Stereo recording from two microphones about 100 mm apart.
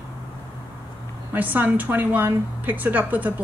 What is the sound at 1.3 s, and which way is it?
A woman's voice, 20° right (ahead or behind).